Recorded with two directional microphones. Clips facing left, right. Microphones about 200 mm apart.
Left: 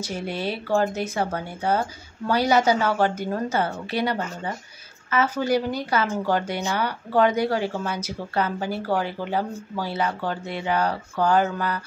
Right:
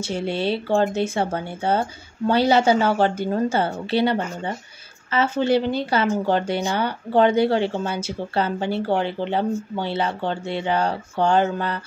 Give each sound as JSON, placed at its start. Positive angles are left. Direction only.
{"t": 0.0, "sound": "speech", "side_deg": -25}